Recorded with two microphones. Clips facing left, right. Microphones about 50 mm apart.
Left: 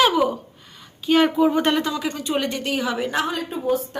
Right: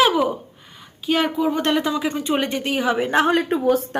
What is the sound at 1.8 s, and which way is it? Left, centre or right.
Speech, centre.